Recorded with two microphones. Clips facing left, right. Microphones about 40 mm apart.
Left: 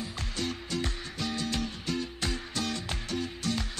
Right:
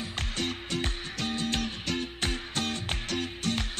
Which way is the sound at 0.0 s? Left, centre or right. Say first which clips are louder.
Right 2 dB; right.